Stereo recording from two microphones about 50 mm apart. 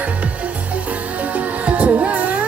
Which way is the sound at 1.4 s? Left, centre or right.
Right.